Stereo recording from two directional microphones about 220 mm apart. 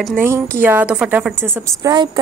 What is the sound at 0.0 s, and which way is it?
A woman's voice, 10° right (ahead or behind).